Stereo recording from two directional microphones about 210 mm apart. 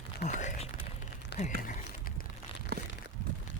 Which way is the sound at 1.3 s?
50° left (ahead or behind).